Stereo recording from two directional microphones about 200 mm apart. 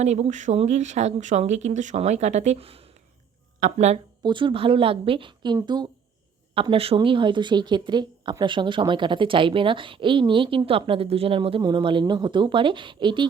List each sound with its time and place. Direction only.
0.0 s speech: 35° right (ahead or behind)
4.2 s a woman's voice: 25° right (ahead or behind)